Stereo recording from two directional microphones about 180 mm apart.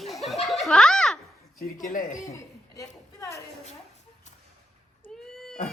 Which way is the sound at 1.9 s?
50° left (ahead or behind).